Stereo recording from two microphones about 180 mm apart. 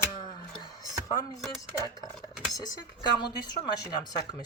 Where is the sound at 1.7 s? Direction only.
20° left (ahead or behind).